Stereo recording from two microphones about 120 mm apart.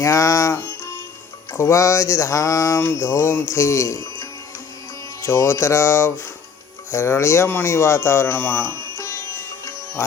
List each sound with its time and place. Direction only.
0.0 s music: 25° left (ahead or behind)
1.5 s a sound: 25° left (ahead or behind)
6.9 s speech: 20° left (ahead or behind)